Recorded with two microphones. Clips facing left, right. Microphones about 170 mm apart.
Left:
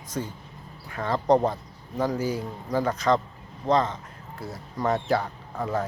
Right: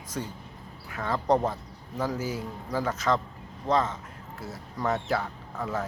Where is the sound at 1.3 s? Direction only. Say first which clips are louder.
Left 4 dB; 30° left (ahead or behind).